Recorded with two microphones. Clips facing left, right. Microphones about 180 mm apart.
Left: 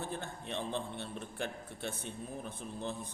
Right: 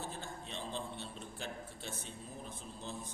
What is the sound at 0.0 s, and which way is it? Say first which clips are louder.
A man's voice: left 4 dB; 60° left (ahead or behind).